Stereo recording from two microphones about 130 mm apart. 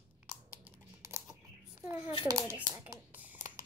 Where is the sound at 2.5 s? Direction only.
15° right (ahead or behind).